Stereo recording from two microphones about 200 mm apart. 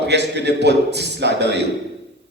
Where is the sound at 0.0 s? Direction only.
60° right (ahead or behind).